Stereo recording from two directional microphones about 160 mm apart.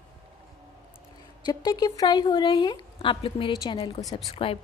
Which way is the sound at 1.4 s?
25° left (ahead or behind).